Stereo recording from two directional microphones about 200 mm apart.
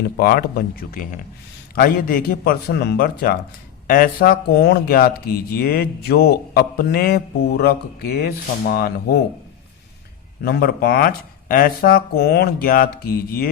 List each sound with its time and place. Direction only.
0.2 s speech: 50° left (ahead or behind)
10.4 s speech: 50° left (ahead or behind)